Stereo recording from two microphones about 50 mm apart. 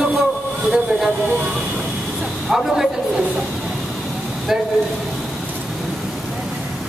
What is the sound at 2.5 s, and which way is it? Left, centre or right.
Speech, centre.